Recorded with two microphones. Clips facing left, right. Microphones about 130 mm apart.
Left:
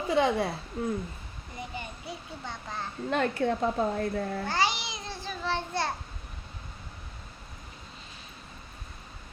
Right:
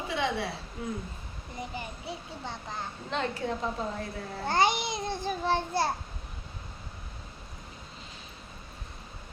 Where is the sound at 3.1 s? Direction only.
55° left (ahead or behind).